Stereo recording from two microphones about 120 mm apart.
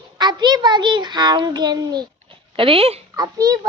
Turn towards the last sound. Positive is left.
turn(degrees=-30)  # may be behind; listen again after turning